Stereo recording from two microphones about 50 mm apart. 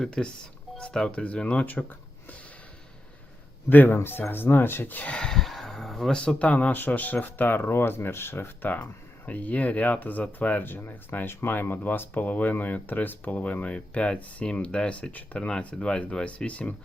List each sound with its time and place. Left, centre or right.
0.2 s gasp: centre
0.8 s speech: left
3.7 s speech: left
5.1 s gasp: centre
5.4 s a sound: centre
6.4 s speech: left